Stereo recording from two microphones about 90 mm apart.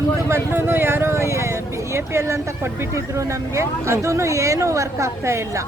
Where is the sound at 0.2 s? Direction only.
30° right (ahead or behind).